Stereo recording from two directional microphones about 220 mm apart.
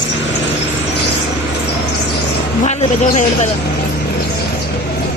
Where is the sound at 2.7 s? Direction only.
30° left (ahead or behind).